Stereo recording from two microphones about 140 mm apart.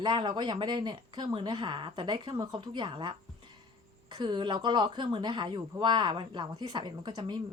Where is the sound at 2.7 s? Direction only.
40° right (ahead or behind).